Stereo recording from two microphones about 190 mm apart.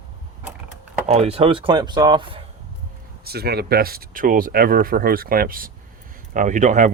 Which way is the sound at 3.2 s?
55° right (ahead or behind).